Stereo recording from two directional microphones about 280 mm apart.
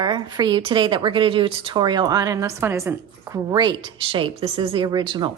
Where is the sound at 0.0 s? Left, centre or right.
Centre.